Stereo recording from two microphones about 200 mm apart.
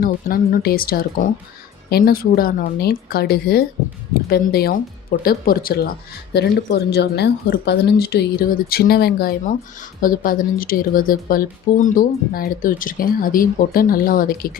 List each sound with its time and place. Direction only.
0.0 s speech: 45° left (ahead or behind)